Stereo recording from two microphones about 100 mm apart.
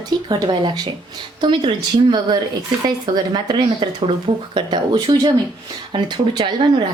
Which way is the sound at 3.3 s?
50° right (ahead or behind).